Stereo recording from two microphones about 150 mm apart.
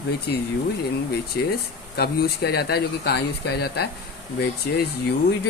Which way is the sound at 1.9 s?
90° left.